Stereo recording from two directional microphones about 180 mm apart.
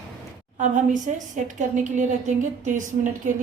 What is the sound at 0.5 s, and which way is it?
A woman's voice, 45° right (ahead or behind).